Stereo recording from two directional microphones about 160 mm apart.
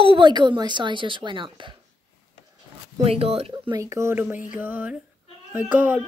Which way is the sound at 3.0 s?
40° right (ahead or behind).